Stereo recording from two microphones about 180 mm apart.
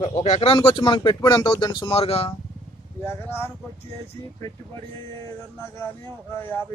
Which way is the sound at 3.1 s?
10° left (ahead or behind).